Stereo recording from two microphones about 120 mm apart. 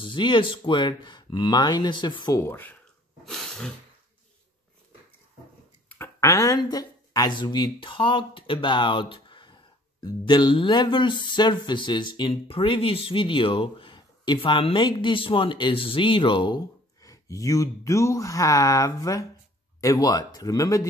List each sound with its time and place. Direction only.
0.0 s speech: 40° left (ahead or behind)
2.3 s speech: 20° left (ahead or behind)
3.3 s sneeze: 5° left (ahead or behind)
5.9 s speech: 20° left (ahead or behind)